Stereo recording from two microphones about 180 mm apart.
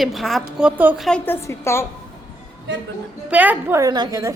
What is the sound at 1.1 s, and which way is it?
Speech, 10° left (ahead or behind).